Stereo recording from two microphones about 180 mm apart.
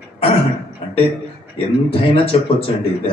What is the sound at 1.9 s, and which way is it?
A man's voice, 30° left (ahead or behind).